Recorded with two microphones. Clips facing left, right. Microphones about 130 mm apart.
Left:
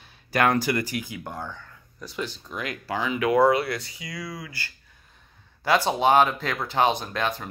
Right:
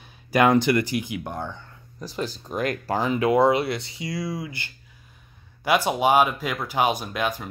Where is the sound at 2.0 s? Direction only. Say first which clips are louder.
Right 3 dB; 35° right (ahead or behind).